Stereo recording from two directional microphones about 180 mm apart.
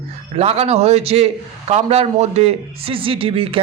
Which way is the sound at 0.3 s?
35° right (ahead or behind).